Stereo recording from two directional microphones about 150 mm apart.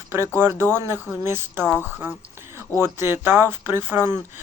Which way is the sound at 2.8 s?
15° right (ahead or behind).